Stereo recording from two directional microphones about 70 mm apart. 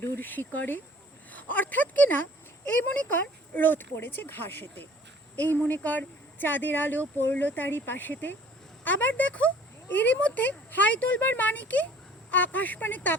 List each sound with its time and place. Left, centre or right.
0.2 s speech: left